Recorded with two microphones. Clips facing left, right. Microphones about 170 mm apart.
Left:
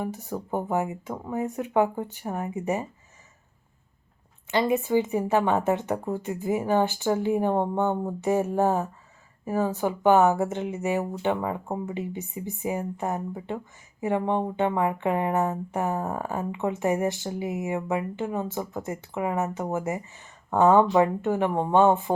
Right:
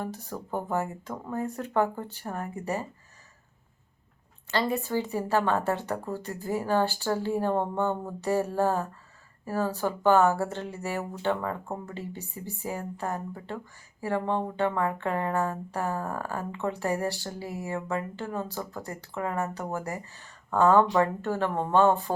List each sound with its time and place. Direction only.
0.0 s speech: 15° left (ahead or behind)
4.5 s speech: 15° left (ahead or behind)